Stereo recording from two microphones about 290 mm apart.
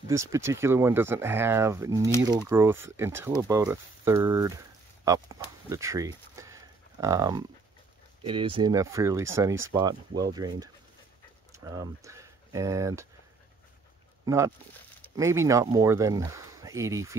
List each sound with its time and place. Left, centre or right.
0.1 s speech: centre
5.0 s chicken: centre
8.2 s speech: centre
14.2 s speech: centre